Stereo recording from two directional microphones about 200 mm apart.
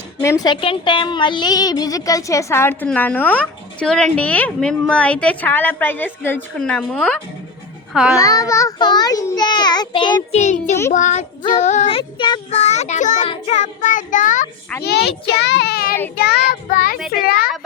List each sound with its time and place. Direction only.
0.2 s a woman's voice: 15° left (ahead or behind); by 8.2 s 5° right (ahead or behind)
8.2 s a child's voice: 15° left (ahead or behind)
10.3 s child singing: 35° left (ahead or behind)
14.8 s a child's voice: 55° left (ahead or behind)